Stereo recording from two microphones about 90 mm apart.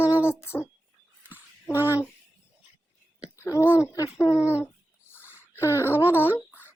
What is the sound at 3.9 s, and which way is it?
Speech, 35° left (ahead or behind).